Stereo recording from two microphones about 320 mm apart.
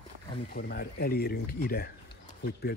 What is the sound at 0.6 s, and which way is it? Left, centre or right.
A man's voice, left.